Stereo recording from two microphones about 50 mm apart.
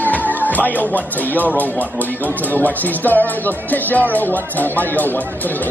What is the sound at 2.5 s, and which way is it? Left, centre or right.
Speech, left.